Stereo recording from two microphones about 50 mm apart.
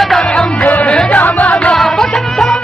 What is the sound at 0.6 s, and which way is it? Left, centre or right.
Music, left.